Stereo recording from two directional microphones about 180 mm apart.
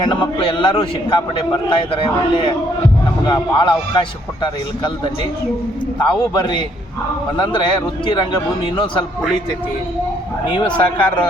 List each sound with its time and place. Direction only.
0.0 s a man's voice: 25° left (ahead or behind)
6.0 s a man's voice: 25° left (ahead or behind)
10.6 s a man's voice: 25° left (ahead or behind)